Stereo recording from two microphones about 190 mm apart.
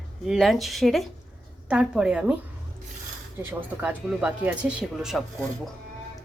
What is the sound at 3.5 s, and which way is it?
Speech, 10° right (ahead or behind).